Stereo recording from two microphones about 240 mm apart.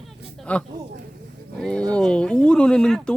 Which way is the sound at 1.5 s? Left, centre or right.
Centre.